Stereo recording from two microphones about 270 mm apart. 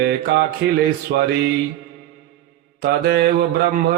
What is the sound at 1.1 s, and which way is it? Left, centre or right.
Mantra, right.